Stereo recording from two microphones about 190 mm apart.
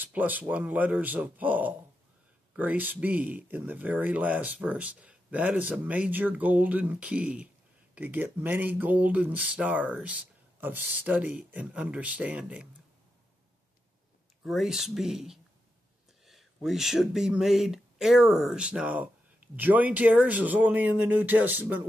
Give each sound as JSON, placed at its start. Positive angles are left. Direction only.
{"t": 0.0, "sound": "speech", "side_deg": -10}
{"t": 14.4, "sound": "speech", "side_deg": 0}